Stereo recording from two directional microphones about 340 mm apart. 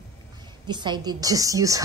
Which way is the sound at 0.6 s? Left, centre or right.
Centre.